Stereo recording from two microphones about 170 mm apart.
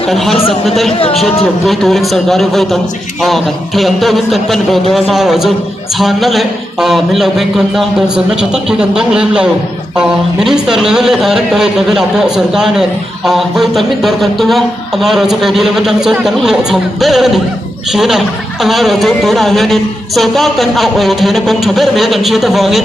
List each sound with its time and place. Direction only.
0.1 s a woman's voice: centre (ahead or behind)
1.6 s a woman's voice: centre (ahead or behind)